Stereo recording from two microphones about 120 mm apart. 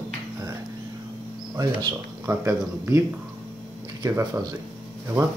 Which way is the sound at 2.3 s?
20° right (ahead or behind).